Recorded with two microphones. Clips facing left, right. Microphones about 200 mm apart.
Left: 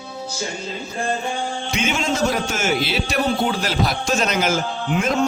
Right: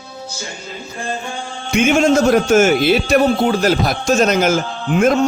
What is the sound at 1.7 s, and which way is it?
A man's voice, 50° right (ahead or behind).